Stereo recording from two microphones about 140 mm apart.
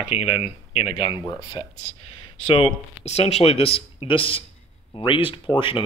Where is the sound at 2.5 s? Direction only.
45° left (ahead or behind).